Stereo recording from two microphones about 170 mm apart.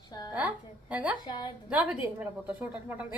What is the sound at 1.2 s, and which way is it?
Speech, 25° left (ahead or behind).